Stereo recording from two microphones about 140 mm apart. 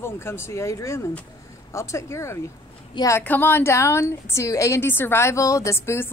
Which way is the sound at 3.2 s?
15° left (ahead or behind).